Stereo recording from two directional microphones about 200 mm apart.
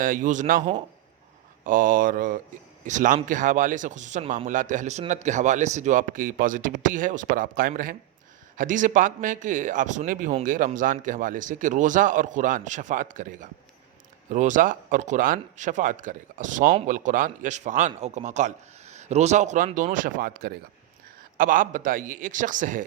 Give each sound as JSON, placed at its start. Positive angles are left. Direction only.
{"t": 0.0, "sound": "mantra", "side_deg": -45}
{"t": 2.8, "sound": "a man's voice", "side_deg": -40}